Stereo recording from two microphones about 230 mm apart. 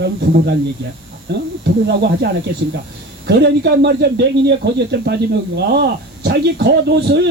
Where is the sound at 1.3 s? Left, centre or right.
Right.